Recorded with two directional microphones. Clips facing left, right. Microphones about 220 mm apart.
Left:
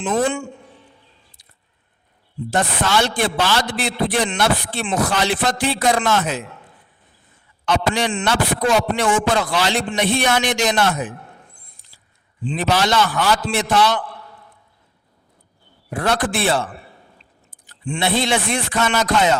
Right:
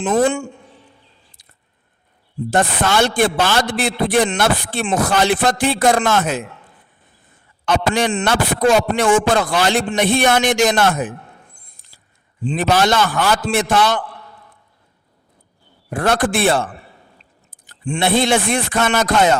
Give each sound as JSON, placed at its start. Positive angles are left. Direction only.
{"t": 0.0, "sound": "a man's voice", "side_deg": -45}
{"t": 2.5, "sound": "a man's voice", "side_deg": -50}
{"t": 7.6, "sound": "a man's voice", "side_deg": -50}
{"t": 11.8, "sound": "a sound", "side_deg": -50}
{"t": 12.4, "sound": "a man's voice", "side_deg": -45}
{"t": 15.9, "sound": "a man's voice", "side_deg": -50}
{"t": 17.7, "sound": "a man's voice", "side_deg": -45}